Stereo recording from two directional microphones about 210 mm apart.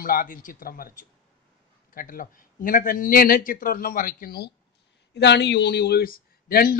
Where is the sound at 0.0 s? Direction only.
40° left (ahead or behind).